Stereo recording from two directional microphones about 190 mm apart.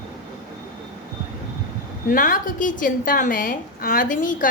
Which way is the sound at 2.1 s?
45° left (ahead or behind).